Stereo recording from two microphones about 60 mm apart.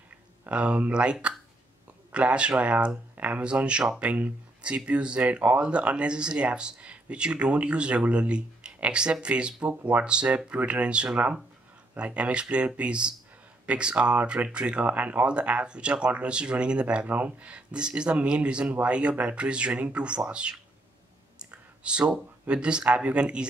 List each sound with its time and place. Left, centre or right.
0.5 s speech: right
2.1 s speech: centre
21.4 s clicking: centre
22.5 s speech: centre